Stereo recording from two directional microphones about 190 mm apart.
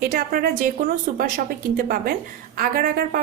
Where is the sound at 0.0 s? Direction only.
50° right (ahead or behind).